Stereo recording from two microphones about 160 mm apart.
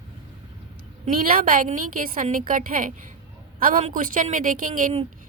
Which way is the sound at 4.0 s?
55° right (ahead or behind).